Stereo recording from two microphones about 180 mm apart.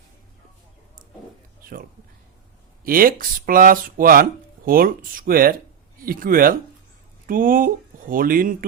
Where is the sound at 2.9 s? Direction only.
50° right (ahead or behind).